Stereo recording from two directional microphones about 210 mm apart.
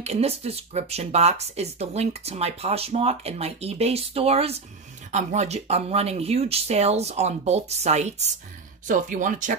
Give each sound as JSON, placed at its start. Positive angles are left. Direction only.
{"t": 0.0, "sound": "speech", "side_deg": -30}